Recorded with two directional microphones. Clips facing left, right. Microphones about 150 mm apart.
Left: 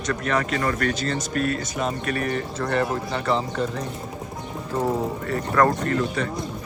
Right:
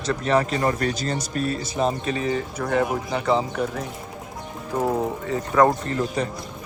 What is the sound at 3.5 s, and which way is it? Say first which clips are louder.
Speech: even; 5° right (ahead or behind).